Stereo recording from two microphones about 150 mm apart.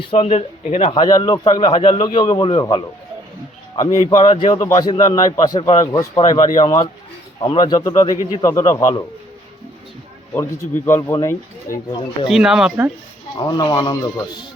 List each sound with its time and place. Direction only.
0.0 s speech: 35° left (ahead or behind)
1.0 s a man's voice: 25° left (ahead or behind)
10.3 s speech: 15° left (ahead or behind)
12.3 s speech: 5° right (ahead or behind)
13.3 s a man's voice: 25° left (ahead or behind)